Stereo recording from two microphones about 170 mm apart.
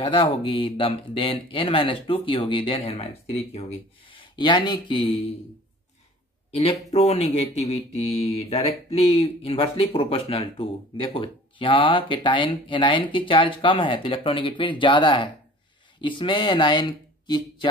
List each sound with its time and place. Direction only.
0.0 s speech: 35° left (ahead or behind)
6.5 s speech: 35° left (ahead or behind)